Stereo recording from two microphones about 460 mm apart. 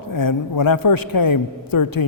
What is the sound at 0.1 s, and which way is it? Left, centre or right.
A man's voice, left.